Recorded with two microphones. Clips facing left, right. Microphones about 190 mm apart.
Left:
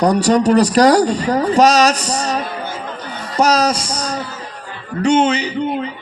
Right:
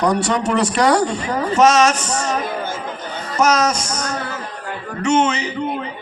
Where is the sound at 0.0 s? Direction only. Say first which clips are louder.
Left 5 dB; 35° left (ahead or behind).